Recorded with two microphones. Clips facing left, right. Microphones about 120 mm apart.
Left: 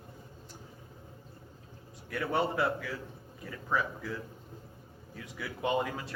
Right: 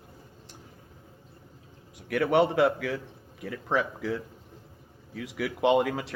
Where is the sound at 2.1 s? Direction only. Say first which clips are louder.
Right 8 dB; 90° right.